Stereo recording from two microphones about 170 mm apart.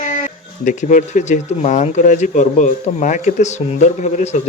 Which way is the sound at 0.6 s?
45° left (ahead or behind).